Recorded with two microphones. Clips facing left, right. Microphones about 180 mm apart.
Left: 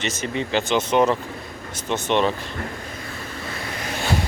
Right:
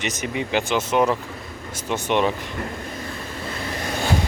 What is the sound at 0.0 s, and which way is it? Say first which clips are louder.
Speech: even; 15° right (ahead or behind).